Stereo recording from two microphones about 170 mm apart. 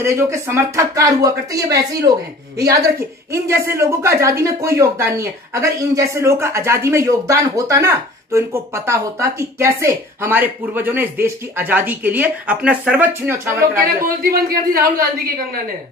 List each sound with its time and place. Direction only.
0.0 s speech: 15° right (ahead or behind)
13.7 s a man's voice: 60° right (ahead or behind)